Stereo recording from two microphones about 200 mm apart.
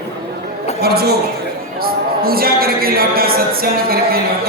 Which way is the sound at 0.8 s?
50° right (ahead or behind).